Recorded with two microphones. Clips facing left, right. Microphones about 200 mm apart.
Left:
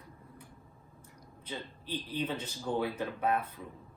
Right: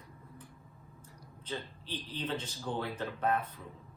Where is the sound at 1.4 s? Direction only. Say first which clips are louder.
Even; 10° left (ahead or behind).